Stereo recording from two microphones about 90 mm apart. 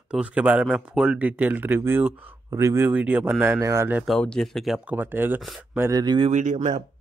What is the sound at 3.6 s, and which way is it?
Speech, 30° right (ahead or behind).